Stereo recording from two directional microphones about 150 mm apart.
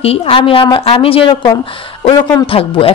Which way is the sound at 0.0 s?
40° left (ahead or behind).